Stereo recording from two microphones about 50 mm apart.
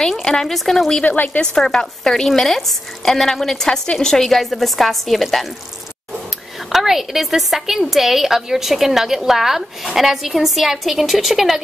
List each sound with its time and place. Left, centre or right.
0.2 s a woman's voice: centre
1.0 s a woman's voice: left
1.4 s a woman's voice: centre
3.6 s a woman's voice: centre
6.7 s a woman's voice: centre